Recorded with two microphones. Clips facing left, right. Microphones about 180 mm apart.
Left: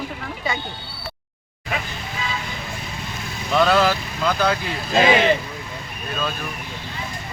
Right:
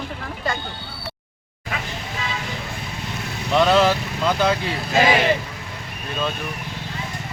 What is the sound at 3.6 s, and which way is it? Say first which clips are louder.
Speech: right 1 dB; 25° right (ahead or behind).